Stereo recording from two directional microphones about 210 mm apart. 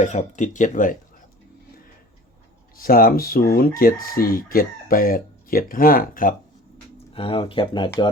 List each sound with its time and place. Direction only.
0.0 s speech: 35° left (ahead or behind)
2.7 s speech: 45° left (ahead or behind)
7.1 s speech: 25° left (ahead or behind)